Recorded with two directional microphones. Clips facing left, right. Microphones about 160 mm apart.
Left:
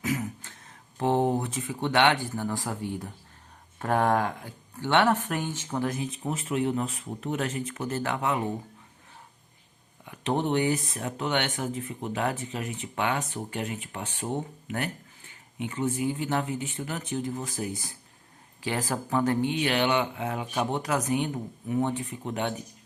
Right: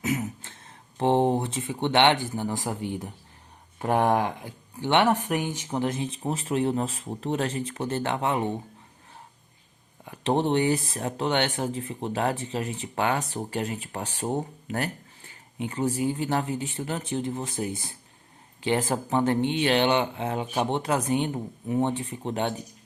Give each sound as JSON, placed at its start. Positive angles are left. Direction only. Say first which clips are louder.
{"t": 0.0, "sound": "speech", "louder": "right 2 dB", "side_deg": -25}
{"t": 10.1, "sound": "speech", "louder": "right 3 dB", "side_deg": -35}